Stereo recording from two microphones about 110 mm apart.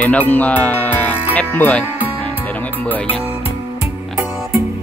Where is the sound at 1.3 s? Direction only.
15° left (ahead or behind).